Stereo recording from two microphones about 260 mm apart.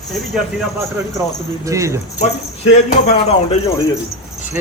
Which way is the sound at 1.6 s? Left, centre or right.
Centre.